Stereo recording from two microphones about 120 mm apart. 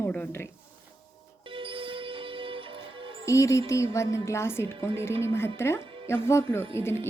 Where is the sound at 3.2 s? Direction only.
25° left (ahead or behind).